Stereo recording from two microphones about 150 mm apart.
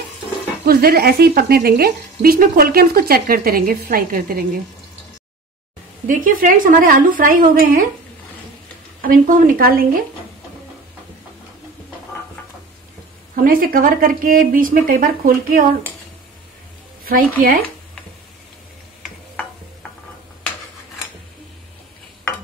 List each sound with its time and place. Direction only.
0.7 s speech: 90° right
6.0 s speech: 65° right (ahead or behind)
9.0 s speech: 70° right (ahead or behind)
13.4 s speech: 75° right (ahead or behind)
17.0 s speech: 75° right (ahead or behind)